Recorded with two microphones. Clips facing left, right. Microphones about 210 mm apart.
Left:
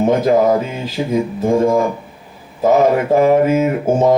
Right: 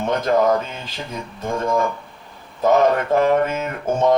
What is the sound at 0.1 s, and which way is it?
Mantra, 5° left (ahead or behind).